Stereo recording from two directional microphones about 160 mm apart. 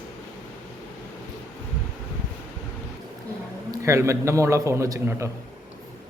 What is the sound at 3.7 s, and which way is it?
A man's voice, 20° right (ahead or behind).